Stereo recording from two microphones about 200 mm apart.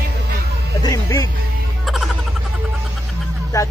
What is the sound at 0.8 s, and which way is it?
Speech, 20° left (ahead or behind).